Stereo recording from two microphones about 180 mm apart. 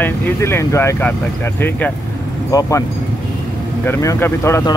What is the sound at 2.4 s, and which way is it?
Speech, 20° left (ahead or behind).